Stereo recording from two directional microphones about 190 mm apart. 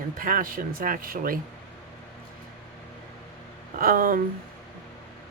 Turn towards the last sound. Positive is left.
turn(degrees=-50)  # may be behind; listen again after turning